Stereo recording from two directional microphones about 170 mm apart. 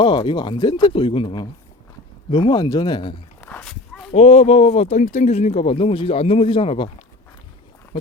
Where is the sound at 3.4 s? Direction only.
10° left (ahead or behind).